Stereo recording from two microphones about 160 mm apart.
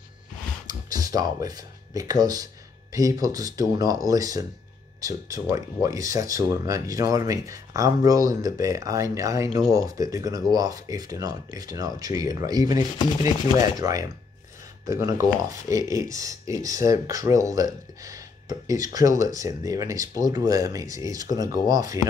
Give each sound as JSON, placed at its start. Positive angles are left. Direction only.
{"t": 0.7, "sound": "speech", "side_deg": -25}